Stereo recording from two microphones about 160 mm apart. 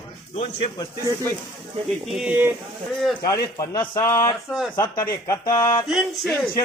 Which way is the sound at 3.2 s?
20° left (ahead or behind).